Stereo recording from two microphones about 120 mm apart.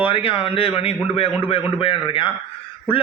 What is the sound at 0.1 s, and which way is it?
A man's voice, 50° left (ahead or behind).